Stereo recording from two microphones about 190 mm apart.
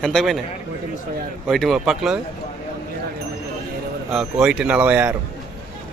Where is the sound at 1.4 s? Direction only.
Centre (ahead or behind).